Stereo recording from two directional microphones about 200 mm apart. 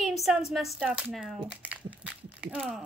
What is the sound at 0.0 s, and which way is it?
Speech, centre (ahead or behind).